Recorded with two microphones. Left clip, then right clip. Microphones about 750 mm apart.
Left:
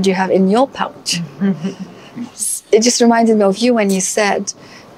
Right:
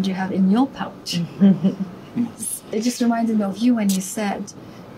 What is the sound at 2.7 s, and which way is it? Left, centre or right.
A woman's voice, left.